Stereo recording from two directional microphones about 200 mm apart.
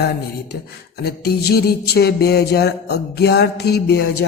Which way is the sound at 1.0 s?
50° left (ahead or behind).